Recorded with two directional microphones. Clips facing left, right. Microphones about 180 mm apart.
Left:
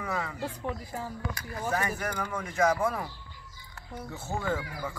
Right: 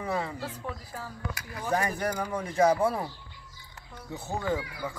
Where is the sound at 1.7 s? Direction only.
35° right (ahead or behind).